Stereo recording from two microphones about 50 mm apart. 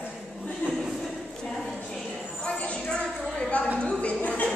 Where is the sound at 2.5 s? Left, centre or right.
Left.